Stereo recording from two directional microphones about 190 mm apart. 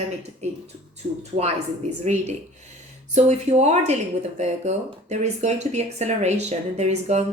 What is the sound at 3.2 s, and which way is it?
Speech, 35° right (ahead or behind).